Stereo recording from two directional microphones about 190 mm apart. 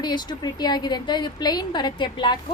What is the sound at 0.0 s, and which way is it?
A woman's voice, 20° left (ahead or behind).